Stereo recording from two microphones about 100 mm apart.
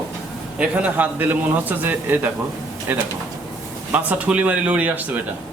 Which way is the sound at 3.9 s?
15° right (ahead or behind).